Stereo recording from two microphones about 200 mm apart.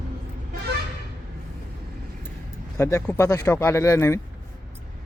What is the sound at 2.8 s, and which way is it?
Speech, 15° left (ahead or behind).